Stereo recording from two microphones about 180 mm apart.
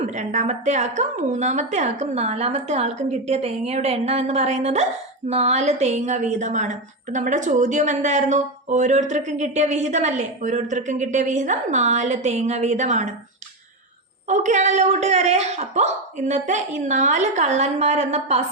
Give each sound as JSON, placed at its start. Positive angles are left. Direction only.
{"t": 0.0, "sound": "a woman's voice", "side_deg": -40}
{"t": 14.3, "sound": "a woman's voice", "side_deg": -40}